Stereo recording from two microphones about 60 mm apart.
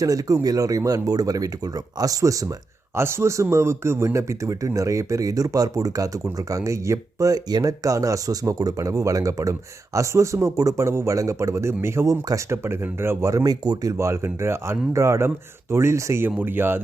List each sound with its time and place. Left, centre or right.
0.0 s speech: right
2.9 s a man's voice: right
13.2 s speech: right
13.9 s a man's voice: right
16.4 s speech: right